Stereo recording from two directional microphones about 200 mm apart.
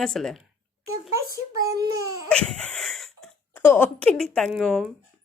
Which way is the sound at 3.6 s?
10° left (ahead or behind).